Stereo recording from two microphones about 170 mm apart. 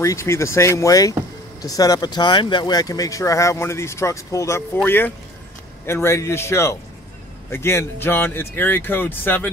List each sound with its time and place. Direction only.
0.0 s speech: 15° left (ahead or behind)